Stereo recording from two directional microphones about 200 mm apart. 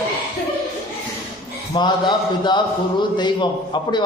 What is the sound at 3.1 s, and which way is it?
Speech, 20° left (ahead or behind).